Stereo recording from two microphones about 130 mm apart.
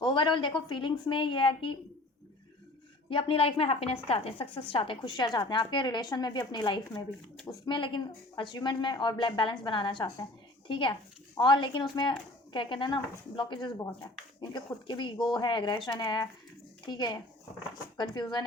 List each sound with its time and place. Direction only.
0.0 s speech: 40° left (ahead or behind)
3.1 s a woman's voice: 45° left (ahead or behind)